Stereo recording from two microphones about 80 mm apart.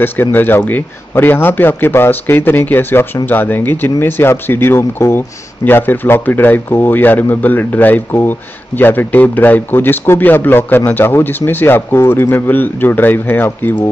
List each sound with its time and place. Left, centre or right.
0.0 s a man's voice: left